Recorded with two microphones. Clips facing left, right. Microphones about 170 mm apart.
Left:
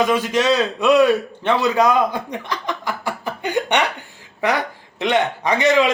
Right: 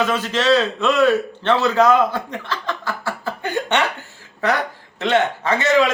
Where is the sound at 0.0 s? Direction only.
15° left (ahead or behind).